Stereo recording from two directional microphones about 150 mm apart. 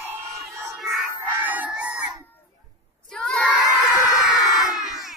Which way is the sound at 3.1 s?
5° left (ahead or behind).